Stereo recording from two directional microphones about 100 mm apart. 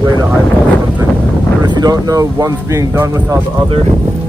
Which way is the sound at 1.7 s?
40° right (ahead or behind).